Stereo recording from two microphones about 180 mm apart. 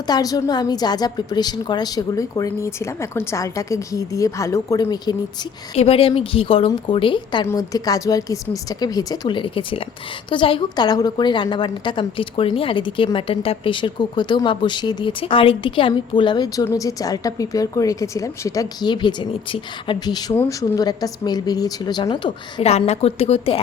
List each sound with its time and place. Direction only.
0.1 s a woman's voice: 20° left (ahead or behind)
5.7 s a woman's voice: 35° left (ahead or behind)